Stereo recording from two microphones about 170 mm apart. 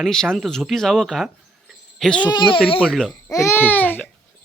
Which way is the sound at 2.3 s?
30° left (ahead or behind).